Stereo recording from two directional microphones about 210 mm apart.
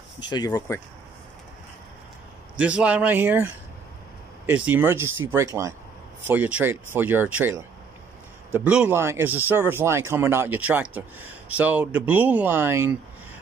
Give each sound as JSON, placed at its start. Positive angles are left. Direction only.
{"t": 0.2, "sound": "speech", "side_deg": 20}
{"t": 2.6, "sound": "speech", "side_deg": -5}